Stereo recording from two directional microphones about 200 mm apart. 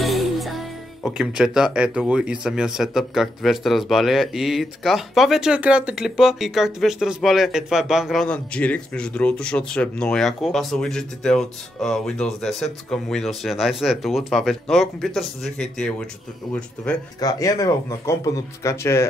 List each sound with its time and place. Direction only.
0.0 s music: centre (ahead or behind)
2.4 s speech: 5° right (ahead or behind)
17.2 s speech: 20° left (ahead or behind)